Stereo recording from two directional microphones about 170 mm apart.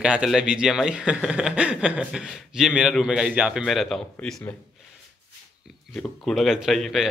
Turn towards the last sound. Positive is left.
turn(degrees=0)  # may be behind; listen again after turning